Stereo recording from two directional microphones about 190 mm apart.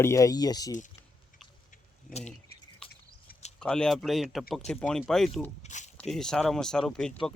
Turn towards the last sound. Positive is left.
turn(degrees=5)  # may be behind; listen again after turning